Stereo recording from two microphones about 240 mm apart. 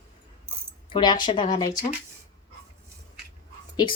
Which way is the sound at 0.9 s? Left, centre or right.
Centre.